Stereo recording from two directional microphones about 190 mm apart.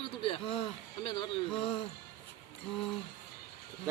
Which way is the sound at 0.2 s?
30° left (ahead or behind).